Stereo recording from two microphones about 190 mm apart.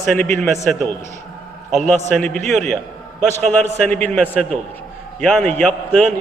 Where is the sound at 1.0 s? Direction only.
35° left (ahead or behind).